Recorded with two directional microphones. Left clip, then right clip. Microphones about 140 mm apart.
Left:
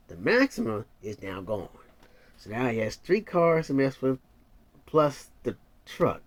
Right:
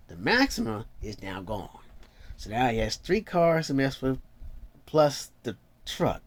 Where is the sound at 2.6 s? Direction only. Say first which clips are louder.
Right 2 dB; 25° right (ahead or behind).